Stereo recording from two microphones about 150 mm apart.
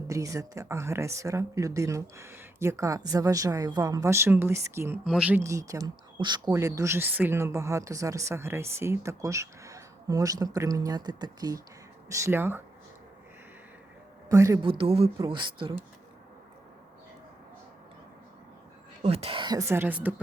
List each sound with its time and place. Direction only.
0.1 s speech: 20° right (ahead or behind)
5.0 s speech: 5° right (ahead or behind)
5.4 s speech: 20° right (ahead or behind)
14.3 s speech: 20° right (ahead or behind)
14.6 s speech: 35° right (ahead or behind)
19.0 s speech: 40° right (ahead or behind); by 20.2 s 10° right (ahead or behind)